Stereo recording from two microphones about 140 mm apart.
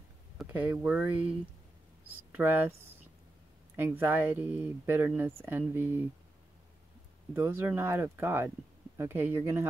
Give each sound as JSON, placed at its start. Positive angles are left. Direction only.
{"t": 0.5, "sound": "speech", "side_deg": -10}
{"t": 7.3, "sound": "speech", "side_deg": -15}